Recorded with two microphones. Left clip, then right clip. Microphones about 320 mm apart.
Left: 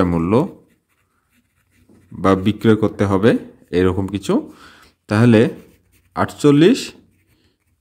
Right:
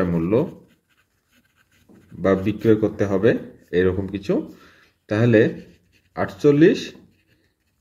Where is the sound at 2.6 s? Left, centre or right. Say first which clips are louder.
Left 2 dB; left.